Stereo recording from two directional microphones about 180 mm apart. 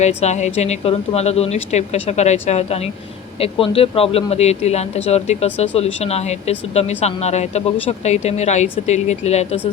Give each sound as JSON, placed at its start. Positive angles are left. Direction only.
{"t": 0.0, "sound": "speech", "side_deg": 35}